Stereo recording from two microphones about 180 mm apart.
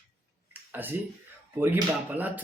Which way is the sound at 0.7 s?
10° right (ahead or behind).